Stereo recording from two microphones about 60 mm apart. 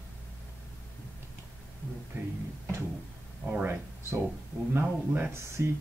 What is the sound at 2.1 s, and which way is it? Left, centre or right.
Speech, right.